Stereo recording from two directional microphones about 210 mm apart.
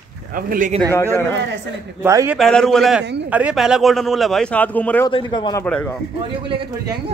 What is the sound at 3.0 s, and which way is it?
Speech, 55° right (ahead or behind).